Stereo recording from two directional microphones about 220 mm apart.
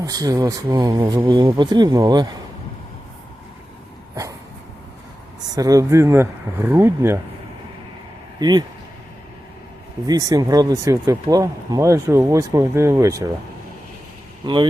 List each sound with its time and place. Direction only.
0.0 s speech: 15° right (ahead or behind)
4.1 s a sound: 15° right (ahead or behind)
5.5 s speech: 15° right (ahead or behind)
8.4 s speech: 20° right (ahead or behind)
10.1 s speech: 15° right (ahead or behind)
14.4 s speech: 20° right (ahead or behind)